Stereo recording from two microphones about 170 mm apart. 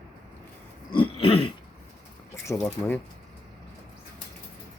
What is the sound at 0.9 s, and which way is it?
Throat clearing, 35° left (ahead or behind).